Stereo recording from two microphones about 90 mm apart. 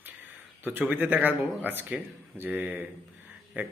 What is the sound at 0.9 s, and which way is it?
A man's voice, 20° right (ahead or behind).